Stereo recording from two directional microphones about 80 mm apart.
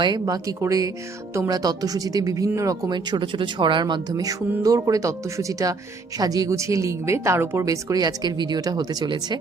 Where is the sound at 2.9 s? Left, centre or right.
Right.